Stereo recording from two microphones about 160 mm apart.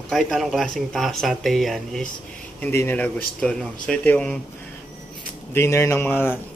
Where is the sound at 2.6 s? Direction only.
15° left (ahead or behind).